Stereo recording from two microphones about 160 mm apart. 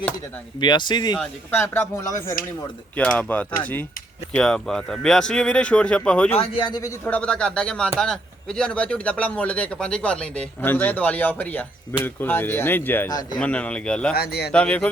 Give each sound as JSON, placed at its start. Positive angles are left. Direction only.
{"t": 0.6, "sound": "speech", "side_deg": 30}
{"t": 1.2, "sound": "a man's voice", "side_deg": 10}
{"t": 2.9, "sound": "a man's voice", "side_deg": 10}
{"t": 6.4, "sound": "speech", "side_deg": 30}
{"t": 7.0, "sound": "a man's voice", "side_deg": 10}
{"t": 13.1, "sound": "speech", "side_deg": 25}
{"t": 13.4, "sound": "a man's voice", "side_deg": 10}
{"t": 14.2, "sound": "speech", "side_deg": 90}
{"t": 14.5, "sound": "a man's voice", "side_deg": 5}